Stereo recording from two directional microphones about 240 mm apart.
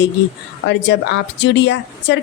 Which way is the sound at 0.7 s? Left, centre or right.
Left.